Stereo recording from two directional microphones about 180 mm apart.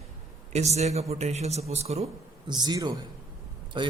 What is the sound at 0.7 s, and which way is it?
A man's voice, 35° right (ahead or behind).